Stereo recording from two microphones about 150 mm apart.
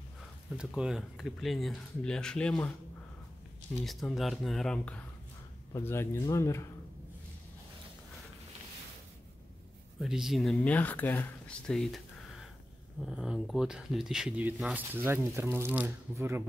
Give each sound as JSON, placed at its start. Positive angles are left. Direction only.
{"t": 0.7, "sound": "speech", "side_deg": -5}
{"t": 3.8, "sound": "speech", "side_deg": 0}
{"t": 9.9, "sound": "speech", "side_deg": -5}